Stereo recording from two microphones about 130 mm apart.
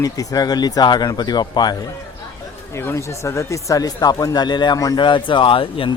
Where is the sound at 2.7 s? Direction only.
20° left (ahead or behind).